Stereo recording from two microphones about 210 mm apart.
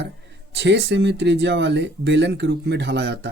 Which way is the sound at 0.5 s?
55° right (ahead or behind).